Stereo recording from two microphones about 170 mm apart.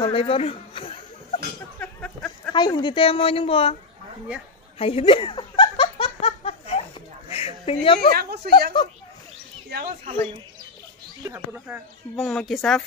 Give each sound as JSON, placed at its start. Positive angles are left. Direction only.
{"t": 0.0, "sound": "a woman's voice", "side_deg": 30}
{"t": 1.8, "sound": "a sound", "side_deg": 10}
{"t": 2.5, "sound": "a woman's voice", "side_deg": 25}
{"t": 4.7, "sound": "giggle", "side_deg": 35}
{"t": 7.2, "sound": "a sound", "side_deg": 35}
{"t": 8.1, "sound": "a woman's voice", "side_deg": -65}
{"t": 11.2, "sound": "speech", "side_deg": -10}
{"t": 12.2, "sound": "speech", "side_deg": 0}